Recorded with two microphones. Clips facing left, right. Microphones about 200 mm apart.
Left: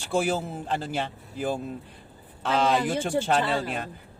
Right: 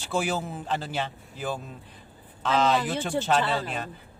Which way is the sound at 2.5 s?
10° left (ahead or behind).